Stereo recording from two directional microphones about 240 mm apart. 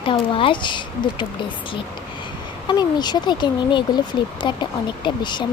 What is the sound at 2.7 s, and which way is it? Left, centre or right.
Speech, centre.